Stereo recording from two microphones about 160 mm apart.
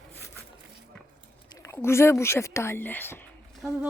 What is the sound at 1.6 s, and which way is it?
Speech, 15° left (ahead or behind).